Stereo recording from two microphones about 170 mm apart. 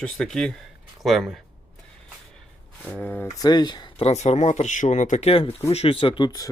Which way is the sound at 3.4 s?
25° left (ahead or behind).